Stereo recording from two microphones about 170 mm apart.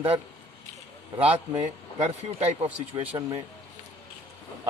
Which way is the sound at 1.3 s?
35° right (ahead or behind).